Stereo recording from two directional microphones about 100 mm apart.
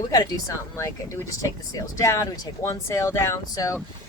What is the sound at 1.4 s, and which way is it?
Speech, 30° left (ahead or behind).